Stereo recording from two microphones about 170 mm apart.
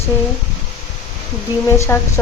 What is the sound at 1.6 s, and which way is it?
Speech, 15° left (ahead or behind).